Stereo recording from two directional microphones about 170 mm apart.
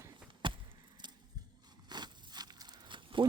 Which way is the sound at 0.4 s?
30° right (ahead or behind).